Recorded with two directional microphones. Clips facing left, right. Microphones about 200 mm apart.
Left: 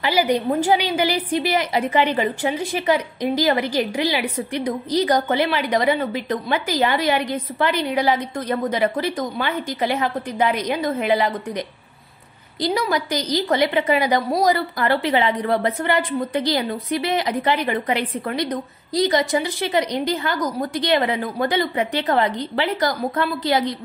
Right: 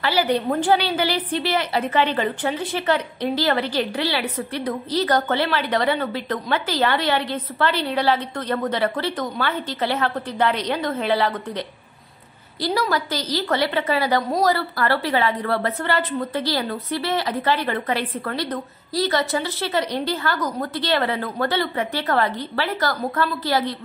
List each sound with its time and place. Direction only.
0.0 s a woman's voice: 10° left (ahead or behind)